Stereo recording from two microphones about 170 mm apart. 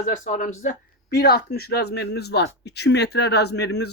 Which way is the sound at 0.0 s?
45° left (ahead or behind).